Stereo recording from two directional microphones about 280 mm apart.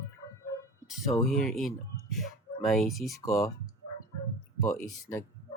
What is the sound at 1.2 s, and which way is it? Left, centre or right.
Speech, centre.